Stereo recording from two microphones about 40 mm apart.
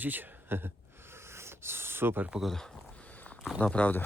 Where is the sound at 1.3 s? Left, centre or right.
Right.